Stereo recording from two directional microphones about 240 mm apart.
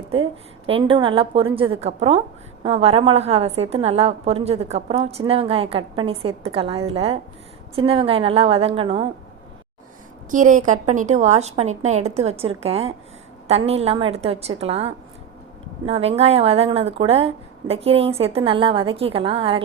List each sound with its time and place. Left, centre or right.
0.7 s a woman's voice: right
10.3 s a woman's voice: right